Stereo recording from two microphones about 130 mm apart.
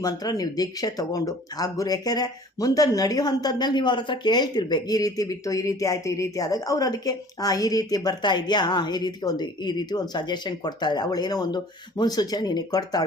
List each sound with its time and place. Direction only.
0.0 s speech: 30° left (ahead or behind)